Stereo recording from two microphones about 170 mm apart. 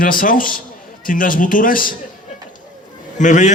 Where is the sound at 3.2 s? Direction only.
45° left (ahead or behind).